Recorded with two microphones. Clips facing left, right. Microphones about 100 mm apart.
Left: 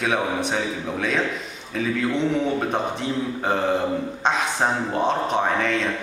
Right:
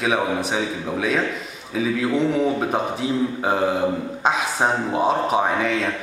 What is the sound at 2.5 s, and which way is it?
Speech, 5° right (ahead or behind).